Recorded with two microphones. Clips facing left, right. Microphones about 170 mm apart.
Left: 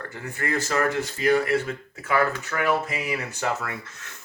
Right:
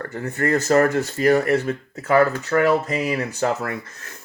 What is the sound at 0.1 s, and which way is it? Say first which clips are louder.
Speech: right 8 dB; 40° right (ahead or behind).